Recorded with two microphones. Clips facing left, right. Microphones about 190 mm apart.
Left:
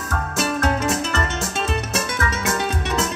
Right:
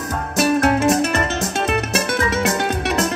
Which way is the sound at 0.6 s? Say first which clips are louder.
Right 6 dB; 70° right (ahead or behind).